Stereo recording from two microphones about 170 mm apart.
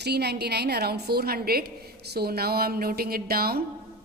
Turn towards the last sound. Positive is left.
turn(degrees=-60)  # may be behind; listen again after turning